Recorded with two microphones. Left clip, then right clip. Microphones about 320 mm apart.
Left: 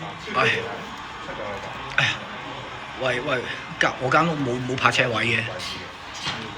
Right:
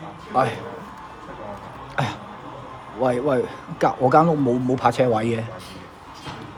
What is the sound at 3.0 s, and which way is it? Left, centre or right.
A man's voice, centre.